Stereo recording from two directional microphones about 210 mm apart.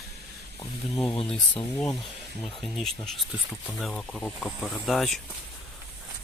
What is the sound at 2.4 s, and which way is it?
Speech, centre (ahead or behind).